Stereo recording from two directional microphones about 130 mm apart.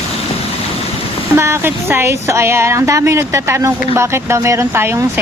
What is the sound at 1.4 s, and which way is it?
Speech, 20° right (ahead or behind).